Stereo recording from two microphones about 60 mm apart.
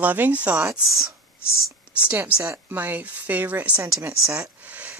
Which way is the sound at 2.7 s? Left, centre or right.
Right.